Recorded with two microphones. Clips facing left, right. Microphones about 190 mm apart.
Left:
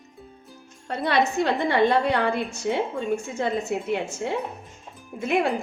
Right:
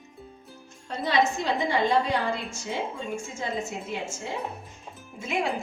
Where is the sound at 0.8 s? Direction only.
60° left (ahead or behind).